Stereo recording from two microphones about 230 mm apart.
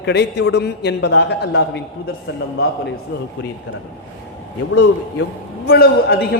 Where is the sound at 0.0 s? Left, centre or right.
Left.